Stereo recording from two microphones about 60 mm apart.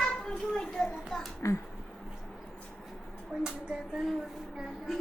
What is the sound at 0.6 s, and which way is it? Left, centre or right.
Children playing, centre.